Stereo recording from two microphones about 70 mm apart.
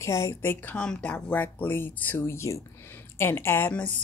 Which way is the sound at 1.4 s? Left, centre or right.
Left.